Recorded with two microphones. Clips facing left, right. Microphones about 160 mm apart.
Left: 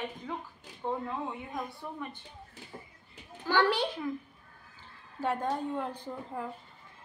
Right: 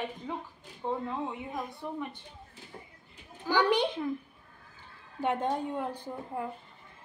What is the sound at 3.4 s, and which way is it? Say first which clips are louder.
Speech: right 1 dB; 15° right (ahead or behind).